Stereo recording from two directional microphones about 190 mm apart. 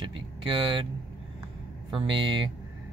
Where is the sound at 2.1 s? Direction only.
25° right (ahead or behind).